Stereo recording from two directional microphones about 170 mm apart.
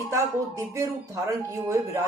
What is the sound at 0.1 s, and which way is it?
Speech, 20° right (ahead or behind).